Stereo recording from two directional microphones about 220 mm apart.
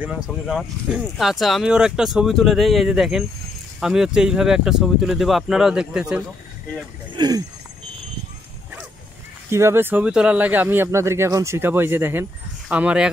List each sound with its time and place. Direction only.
0.0 s speech: 5° right (ahead or behind)
7.2 s speech: 15° right (ahead or behind)
9.5 s speech: 10° right (ahead or behind)